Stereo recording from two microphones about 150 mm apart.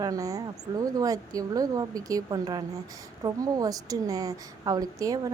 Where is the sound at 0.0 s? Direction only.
25° right (ahead or behind).